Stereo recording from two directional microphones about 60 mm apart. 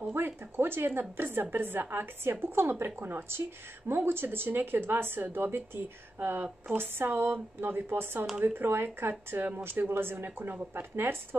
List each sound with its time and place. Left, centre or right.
0.1 s a woman's voice: right